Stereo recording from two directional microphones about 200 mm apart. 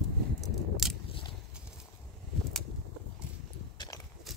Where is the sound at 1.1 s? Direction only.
25° left (ahead or behind).